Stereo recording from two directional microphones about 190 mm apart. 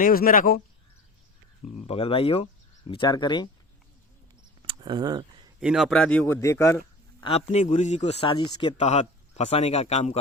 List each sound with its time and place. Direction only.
0.0 s speech: 50° left (ahead or behind)
1.9 s speech: 30° left (ahead or behind)
4.6 s a sound: 25° right (ahead or behind)
5.5 s a man's voice: 5° right (ahead or behind); by 7.3 s 15° left (ahead or behind)
7.3 s a man's voice: 35° left (ahead or behind)
8.8 s a man's voice: 35° left (ahead or behind)